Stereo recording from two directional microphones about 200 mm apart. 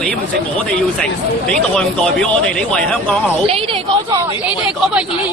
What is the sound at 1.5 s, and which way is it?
A woman's voice, 5° left (ahead or behind).